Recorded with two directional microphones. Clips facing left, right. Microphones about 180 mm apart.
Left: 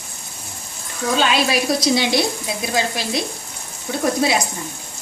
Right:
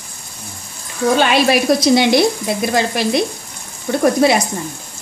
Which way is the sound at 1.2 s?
60° right (ahead or behind).